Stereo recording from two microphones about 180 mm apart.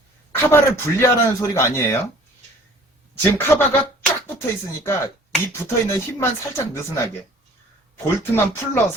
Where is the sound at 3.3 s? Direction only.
10° left (ahead or behind).